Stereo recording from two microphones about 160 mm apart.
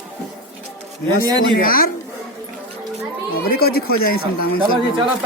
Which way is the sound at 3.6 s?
75° left (ahead or behind).